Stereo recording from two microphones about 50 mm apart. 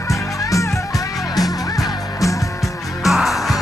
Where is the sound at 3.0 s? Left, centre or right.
Centre.